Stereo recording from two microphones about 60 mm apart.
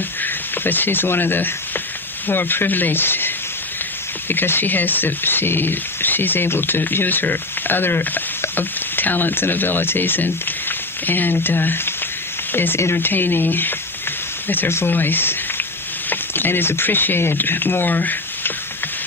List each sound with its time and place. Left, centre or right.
0.2 s speech: left